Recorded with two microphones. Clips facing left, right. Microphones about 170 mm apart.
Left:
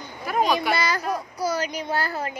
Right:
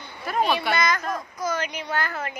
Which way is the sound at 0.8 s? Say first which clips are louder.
Even; 35° left (ahead or behind).